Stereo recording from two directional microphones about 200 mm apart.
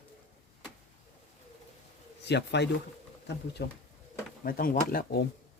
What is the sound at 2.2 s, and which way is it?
Speech, 60° left (ahead or behind).